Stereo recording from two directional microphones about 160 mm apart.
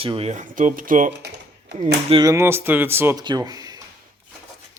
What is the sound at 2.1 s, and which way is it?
Speech, 20° right (ahead or behind).